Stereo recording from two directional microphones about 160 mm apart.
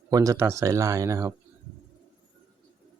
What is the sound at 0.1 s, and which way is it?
Speech, 20° right (ahead or behind).